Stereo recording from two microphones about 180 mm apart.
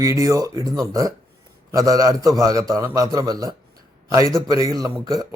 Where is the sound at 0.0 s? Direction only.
15° right (ahead or behind).